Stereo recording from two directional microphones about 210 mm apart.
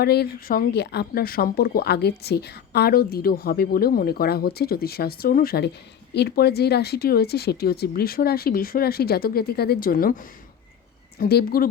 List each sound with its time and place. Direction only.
0.0 s speech: 50° left (ahead or behind)